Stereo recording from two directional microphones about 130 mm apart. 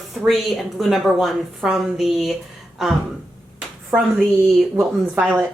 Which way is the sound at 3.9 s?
15° right (ahead or behind).